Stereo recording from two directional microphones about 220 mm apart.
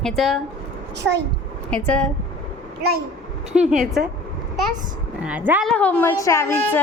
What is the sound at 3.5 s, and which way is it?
Speech, centre (ahead or behind).